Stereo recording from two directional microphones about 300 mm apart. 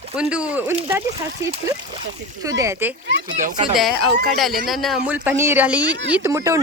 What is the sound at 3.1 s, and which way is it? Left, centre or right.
Speech, right.